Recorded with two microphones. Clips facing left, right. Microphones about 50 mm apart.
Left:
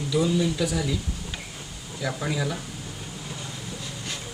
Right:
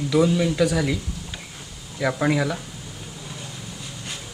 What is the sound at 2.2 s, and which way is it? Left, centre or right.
Speech, right.